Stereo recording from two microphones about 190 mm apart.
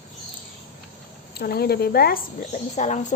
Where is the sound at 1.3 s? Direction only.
55° left (ahead or behind).